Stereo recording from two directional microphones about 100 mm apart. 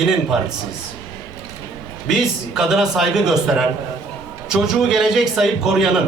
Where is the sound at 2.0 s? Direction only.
5° right (ahead or behind).